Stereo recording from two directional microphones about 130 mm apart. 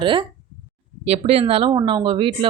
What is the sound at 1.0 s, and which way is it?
Speech, 50° right (ahead or behind).